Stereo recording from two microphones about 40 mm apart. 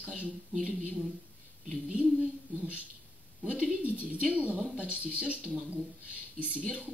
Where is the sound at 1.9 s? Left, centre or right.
Right.